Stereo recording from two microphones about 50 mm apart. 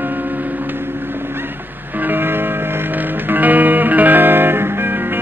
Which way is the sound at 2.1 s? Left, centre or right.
Right.